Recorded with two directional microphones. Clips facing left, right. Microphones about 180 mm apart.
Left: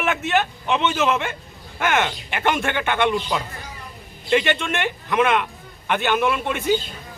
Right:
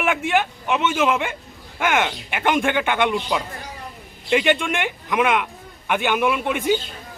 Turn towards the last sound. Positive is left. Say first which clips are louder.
# right 1 dB
turn(degrees=-15)  # may be behind; listen again after turning